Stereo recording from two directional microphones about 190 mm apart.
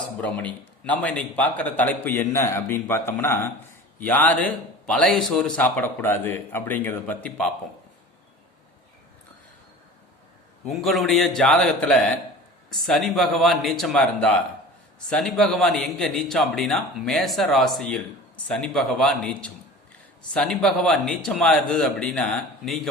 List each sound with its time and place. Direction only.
0.2 s a man's voice: 10° left (ahead or behind)
10.7 s a man's voice: centre (ahead or behind)
20.6 s a man's voice: 5° left (ahead or behind)